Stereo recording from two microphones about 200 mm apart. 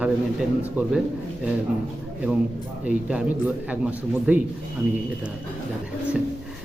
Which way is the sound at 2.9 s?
5° right (ahead or behind).